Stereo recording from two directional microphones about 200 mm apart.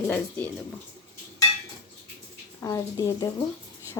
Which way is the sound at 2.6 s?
15° left (ahead or behind).